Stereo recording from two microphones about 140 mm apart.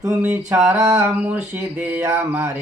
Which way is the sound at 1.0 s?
10° right (ahead or behind).